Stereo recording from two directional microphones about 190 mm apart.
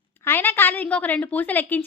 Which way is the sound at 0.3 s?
10° left (ahead or behind).